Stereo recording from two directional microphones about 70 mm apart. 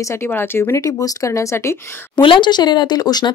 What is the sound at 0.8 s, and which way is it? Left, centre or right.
Speech, left.